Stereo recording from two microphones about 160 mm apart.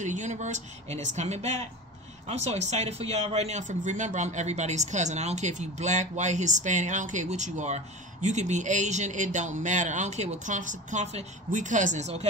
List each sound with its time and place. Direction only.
0.0 s speech: 50° right (ahead or behind)